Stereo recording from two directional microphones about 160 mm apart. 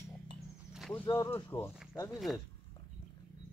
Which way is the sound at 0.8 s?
5° left (ahead or behind).